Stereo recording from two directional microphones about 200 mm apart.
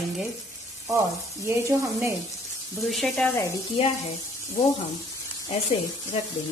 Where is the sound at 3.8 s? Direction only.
30° left (ahead or behind).